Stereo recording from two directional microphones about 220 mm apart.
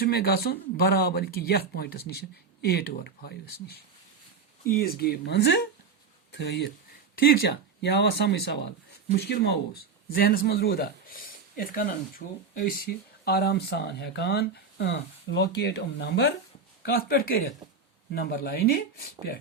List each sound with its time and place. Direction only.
0.0 s speech: 45° left (ahead or behind)